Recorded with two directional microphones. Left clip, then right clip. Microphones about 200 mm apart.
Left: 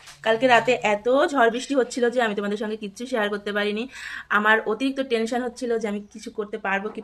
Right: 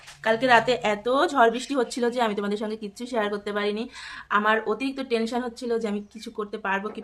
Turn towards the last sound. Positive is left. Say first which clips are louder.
# left 2 dB
turn(degrees=0)  # may be behind; listen again after turning